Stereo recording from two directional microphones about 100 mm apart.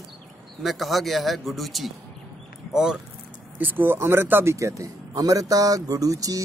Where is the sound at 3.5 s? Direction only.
20° right (ahead or behind).